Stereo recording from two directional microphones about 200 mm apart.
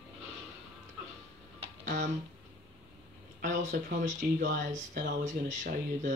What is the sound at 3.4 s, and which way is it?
Speech, 40° right (ahead or behind).